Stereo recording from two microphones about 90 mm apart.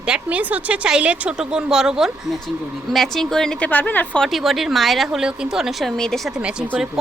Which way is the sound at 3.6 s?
20° left (ahead or behind).